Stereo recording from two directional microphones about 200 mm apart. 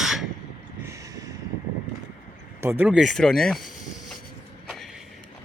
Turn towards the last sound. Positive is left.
turn(degrees=0)  # may be behind; listen again after turning